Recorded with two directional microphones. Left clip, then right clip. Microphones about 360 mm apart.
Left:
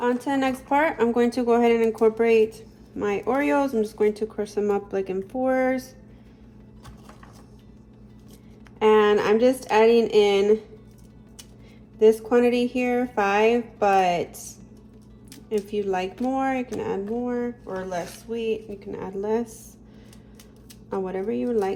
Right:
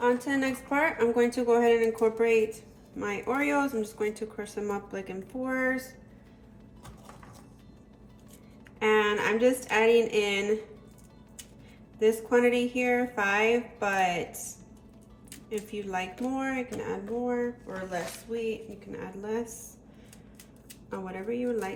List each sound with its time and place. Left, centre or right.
0.0 s speech: centre
8.8 s speech: centre
11.9 s speech: centre
20.9 s speech: centre